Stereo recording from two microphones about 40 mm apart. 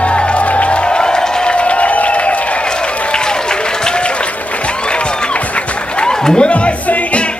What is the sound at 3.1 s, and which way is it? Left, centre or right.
Applause, centre.